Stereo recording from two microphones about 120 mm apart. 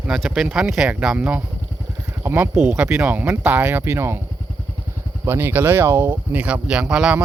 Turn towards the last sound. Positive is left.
turn(degrees=-5)  # may be behind; listen again after turning